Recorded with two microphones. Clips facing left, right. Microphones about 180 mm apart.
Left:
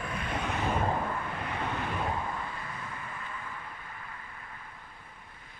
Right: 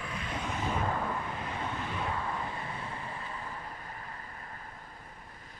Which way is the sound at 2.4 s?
30° right (ahead or behind).